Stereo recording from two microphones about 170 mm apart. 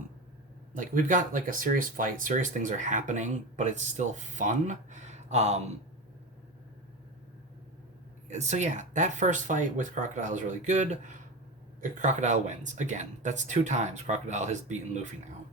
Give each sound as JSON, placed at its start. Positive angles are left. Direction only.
{"t": 0.8, "sound": "speech", "side_deg": -50}
{"t": 8.3, "sound": "speech", "side_deg": -45}